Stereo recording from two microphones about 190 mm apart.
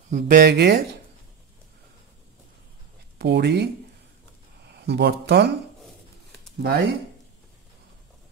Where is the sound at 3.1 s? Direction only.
60° right (ahead or behind).